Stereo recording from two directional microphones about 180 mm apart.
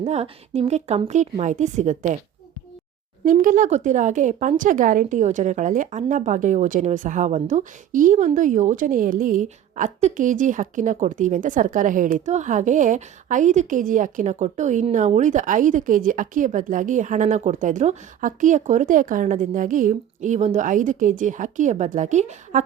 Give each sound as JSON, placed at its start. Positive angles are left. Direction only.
{"t": 0.0, "sound": "a woman's voice", "side_deg": -35}
{"t": 3.2, "sound": "a woman's voice", "side_deg": -45}